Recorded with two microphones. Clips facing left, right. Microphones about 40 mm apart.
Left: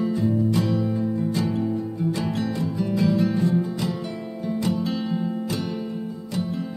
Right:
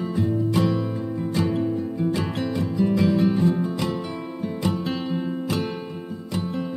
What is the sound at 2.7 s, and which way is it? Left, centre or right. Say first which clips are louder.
Music: right 2 dB; centre.